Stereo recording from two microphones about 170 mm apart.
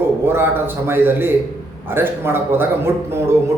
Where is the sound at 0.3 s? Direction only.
15° right (ahead or behind).